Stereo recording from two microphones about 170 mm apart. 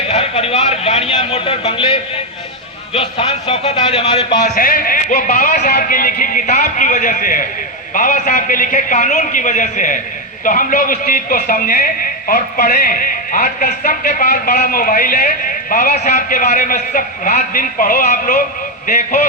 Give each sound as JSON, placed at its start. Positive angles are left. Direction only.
{"t": 0.1, "sound": "a sound", "side_deg": 35}
{"t": 2.9, "sound": "speech", "side_deg": 35}
{"t": 4.5, "sound": "music", "side_deg": 55}
{"t": 5.7, "sound": "a man's voice", "side_deg": 55}